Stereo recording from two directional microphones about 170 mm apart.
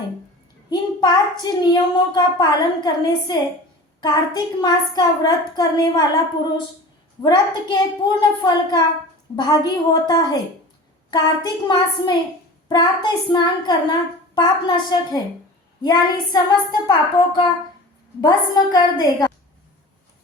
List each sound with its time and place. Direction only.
0.7 s a woman's voice: 25° left (ahead or behind)
7.2 s a woman's voice: 25° left (ahead or behind)